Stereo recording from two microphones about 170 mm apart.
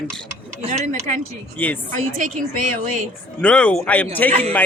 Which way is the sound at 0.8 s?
45° right (ahead or behind).